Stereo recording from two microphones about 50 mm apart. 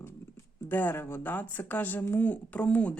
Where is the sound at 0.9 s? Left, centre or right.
Left.